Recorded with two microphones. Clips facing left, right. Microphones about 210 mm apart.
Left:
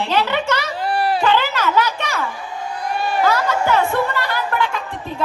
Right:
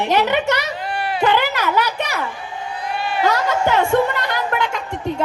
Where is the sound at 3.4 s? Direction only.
20° right (ahead or behind).